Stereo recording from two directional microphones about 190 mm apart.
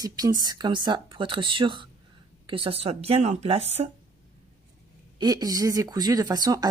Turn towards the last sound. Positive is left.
turn(degrees=-20)  # may be behind; listen again after turning